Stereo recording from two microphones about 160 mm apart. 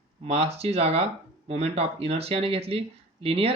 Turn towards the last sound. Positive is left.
turn(degrees=-35)  # may be behind; listen again after turning